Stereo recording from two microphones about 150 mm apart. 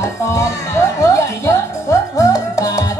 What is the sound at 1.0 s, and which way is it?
Music, 20° left (ahead or behind).